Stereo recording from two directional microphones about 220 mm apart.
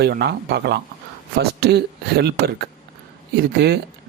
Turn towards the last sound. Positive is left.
turn(degrees=-45)  # may be behind; listen again after turning